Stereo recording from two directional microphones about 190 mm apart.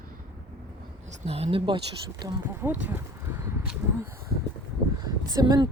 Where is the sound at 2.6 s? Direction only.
10° right (ahead or behind).